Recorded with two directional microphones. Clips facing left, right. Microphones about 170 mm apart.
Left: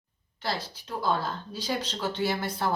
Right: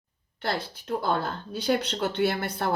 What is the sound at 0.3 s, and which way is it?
Speech, 60° right (ahead or behind).